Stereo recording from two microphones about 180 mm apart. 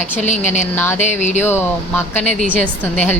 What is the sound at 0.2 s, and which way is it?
Speech, 40° left (ahead or behind).